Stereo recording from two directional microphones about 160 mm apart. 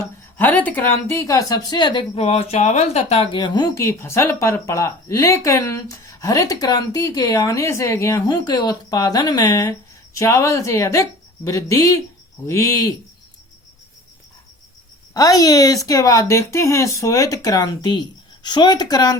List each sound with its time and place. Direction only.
0.3 s speech: 10° left (ahead or behind); by 2.2 s 30° left (ahead or behind)
2.2 s speech: 40° left (ahead or behind)
3.4 s speech: 25° left (ahead or behind)
15.1 s speech: 20° left (ahead or behind)